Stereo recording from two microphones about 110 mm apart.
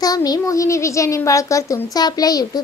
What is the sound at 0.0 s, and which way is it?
A child's voice, 35° left (ahead or behind).